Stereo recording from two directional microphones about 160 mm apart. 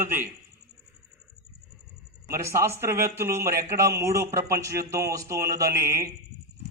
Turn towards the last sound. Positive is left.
turn(degrees=-15)  # may be behind; listen again after turning